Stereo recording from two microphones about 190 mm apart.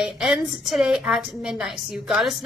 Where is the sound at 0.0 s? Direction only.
Centre (ahead or behind).